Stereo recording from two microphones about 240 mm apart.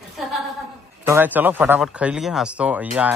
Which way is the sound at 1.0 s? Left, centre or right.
Centre.